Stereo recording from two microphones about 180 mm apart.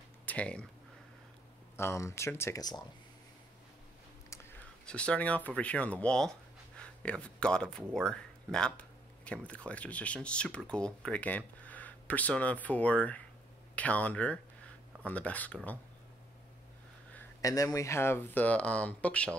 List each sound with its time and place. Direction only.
0.2 s speech: 10° left (ahead or behind)
1.8 s speech: 15° left (ahead or behind)
4.3 s speech: 10° left (ahead or behind)
17.1 s speech: 15° left (ahead or behind)